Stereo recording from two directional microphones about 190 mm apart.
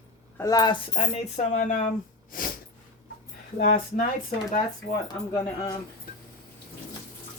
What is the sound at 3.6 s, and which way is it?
Speech, 45° left (ahead or behind).